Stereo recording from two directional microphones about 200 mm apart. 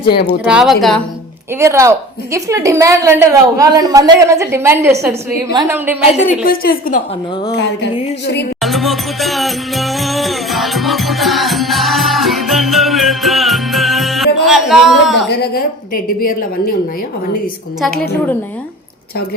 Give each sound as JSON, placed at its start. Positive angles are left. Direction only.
{"t": 0.4, "sound": "speech", "side_deg": -5}
{"t": 1.5, "sound": "a woman's voice", "side_deg": -15}
{"t": 6.1, "sound": "a woman's voice", "side_deg": 40}
{"t": 7.5, "sound": "music", "side_deg": 60}
{"t": 8.6, "sound": "music", "side_deg": 0}
{"t": 15.3, "sound": "a woman's voice", "side_deg": 50}